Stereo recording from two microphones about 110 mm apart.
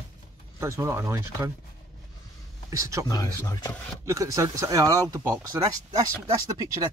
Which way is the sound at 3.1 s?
35° left (ahead or behind).